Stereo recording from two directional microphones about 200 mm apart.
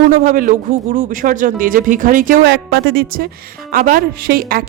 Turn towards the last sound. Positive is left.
turn(degrees=-50)  # may be behind; listen again after turning